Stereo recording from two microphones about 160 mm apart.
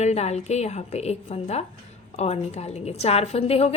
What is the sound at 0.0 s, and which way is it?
A woman's voice, 45° left (ahead or behind).